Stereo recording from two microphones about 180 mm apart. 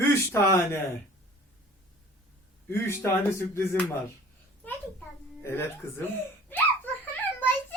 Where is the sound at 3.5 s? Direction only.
15° left (ahead or behind).